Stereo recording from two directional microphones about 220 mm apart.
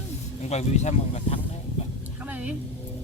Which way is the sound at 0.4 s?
30° left (ahead or behind).